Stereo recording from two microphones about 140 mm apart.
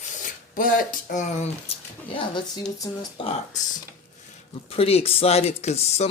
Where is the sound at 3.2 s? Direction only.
40° left (ahead or behind).